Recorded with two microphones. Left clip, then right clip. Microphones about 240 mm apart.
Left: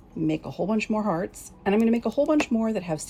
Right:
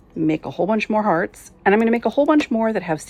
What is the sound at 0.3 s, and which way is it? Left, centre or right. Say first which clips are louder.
Speech: right 7 dB; right.